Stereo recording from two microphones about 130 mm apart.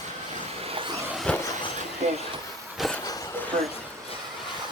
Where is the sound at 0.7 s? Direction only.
45° right (ahead or behind).